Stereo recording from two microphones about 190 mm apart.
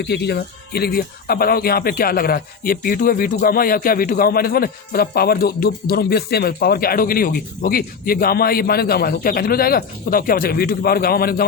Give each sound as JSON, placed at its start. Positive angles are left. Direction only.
{"t": 0.0, "sound": "speech", "side_deg": 60}